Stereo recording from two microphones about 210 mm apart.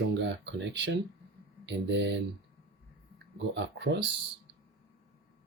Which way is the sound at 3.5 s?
55° right (ahead or behind).